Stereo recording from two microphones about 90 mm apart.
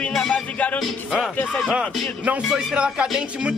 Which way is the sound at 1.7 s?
15° right (ahead or behind).